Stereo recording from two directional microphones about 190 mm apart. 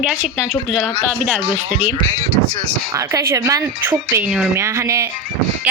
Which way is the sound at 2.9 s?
15° right (ahead or behind).